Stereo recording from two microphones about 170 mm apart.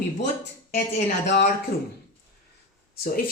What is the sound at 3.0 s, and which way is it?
Speech, 60° left (ahead or behind).